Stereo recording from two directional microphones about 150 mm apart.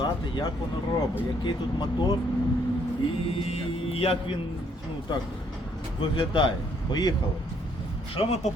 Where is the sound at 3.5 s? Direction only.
40° left (ahead or behind).